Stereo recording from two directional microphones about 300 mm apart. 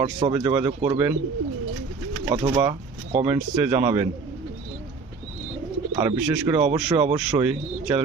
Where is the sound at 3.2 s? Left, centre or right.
Centre.